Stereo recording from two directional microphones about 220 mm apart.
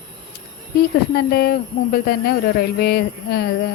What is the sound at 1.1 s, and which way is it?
Speech, 45° left (ahead or behind).